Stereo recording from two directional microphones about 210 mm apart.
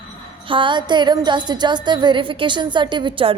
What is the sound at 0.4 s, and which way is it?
Music, 25° right (ahead or behind).